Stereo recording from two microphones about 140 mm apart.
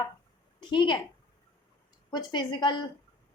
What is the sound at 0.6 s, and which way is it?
Speech, 35° left (ahead or behind).